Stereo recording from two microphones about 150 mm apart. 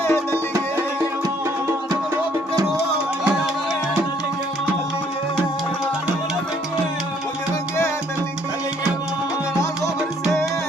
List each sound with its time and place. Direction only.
0.0 s music: 15° left (ahead or behind)